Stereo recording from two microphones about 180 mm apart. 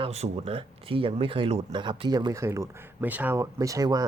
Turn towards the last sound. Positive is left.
turn(degrees=-20)  # may be behind; listen again after turning